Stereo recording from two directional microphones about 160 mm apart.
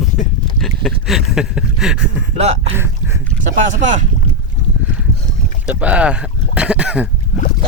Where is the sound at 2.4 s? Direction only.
45° right (ahead or behind).